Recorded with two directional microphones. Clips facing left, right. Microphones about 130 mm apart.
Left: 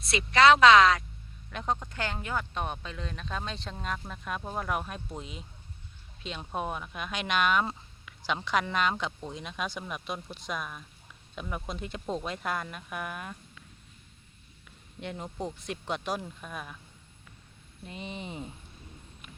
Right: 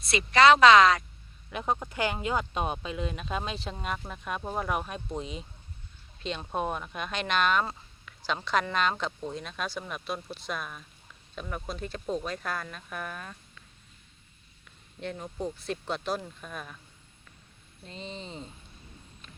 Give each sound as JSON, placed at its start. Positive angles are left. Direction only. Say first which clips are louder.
{"t": 0.0, "sound": "speech", "louder": "right 1 dB", "side_deg": 0}
{"t": 10.6, "sound": "speech", "louder": "left 1 dB", "side_deg": 5}
{"t": 15.0, "sound": "speech", "louder": "right 2 dB", "side_deg": 20}
{"t": 17.8, "sound": "speech", "louder": "left 1 dB", "side_deg": 15}